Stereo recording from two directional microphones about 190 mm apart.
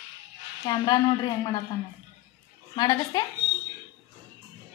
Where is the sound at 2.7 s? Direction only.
20° left (ahead or behind).